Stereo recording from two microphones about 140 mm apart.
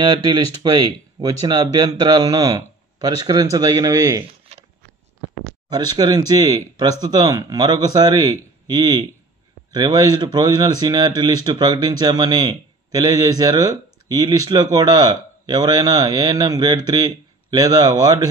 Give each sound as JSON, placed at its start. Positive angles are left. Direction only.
{"t": 0.0, "sound": "a man's voice", "side_deg": -30}
{"t": 5.7, "sound": "speech", "side_deg": -30}